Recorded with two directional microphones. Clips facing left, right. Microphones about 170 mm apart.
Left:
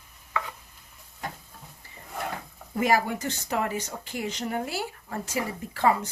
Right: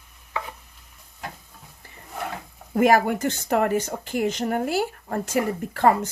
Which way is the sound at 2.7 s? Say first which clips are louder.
Right 6 dB; 55° right (ahead or behind).